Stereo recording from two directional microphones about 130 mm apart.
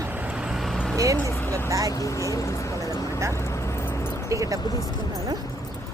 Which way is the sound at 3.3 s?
20° left (ahead or behind).